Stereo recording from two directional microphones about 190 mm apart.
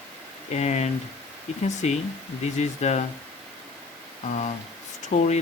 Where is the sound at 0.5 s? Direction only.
35° left (ahead or behind).